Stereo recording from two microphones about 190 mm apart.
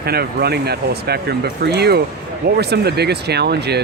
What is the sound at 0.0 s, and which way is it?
Speech, 55° right (ahead or behind).